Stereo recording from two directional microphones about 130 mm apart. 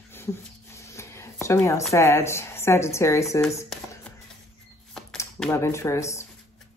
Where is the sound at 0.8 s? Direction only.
20° left (ahead or behind).